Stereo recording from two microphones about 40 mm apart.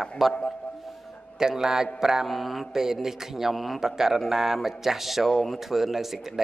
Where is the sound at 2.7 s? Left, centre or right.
Centre.